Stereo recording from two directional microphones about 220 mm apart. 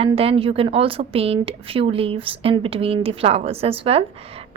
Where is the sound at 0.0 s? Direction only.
25° right (ahead or behind).